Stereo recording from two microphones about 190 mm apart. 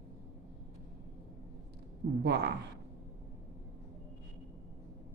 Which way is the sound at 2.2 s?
60° right (ahead or behind).